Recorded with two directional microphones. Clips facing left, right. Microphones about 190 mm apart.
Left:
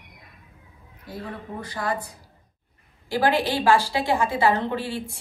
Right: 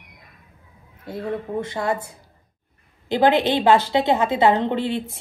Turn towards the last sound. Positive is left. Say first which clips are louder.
# right 5 dB
turn(degrees=-20)  # may be behind; listen again after turning